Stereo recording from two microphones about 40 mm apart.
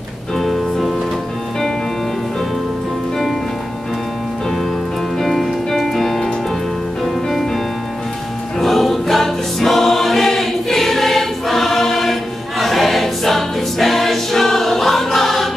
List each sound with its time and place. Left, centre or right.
0.4 s music: centre
5.2 s music: centre
8.5 s choir: centre